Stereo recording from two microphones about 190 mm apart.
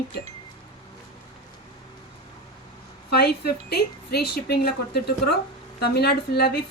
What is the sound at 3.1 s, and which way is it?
A woman's voice, 55° left (ahead or behind).